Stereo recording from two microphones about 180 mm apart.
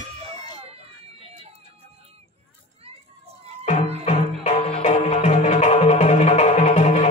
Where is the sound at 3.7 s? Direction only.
35° left (ahead or behind).